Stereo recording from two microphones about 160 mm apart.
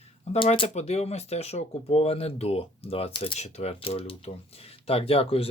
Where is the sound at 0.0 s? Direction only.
35° left (ahead or behind).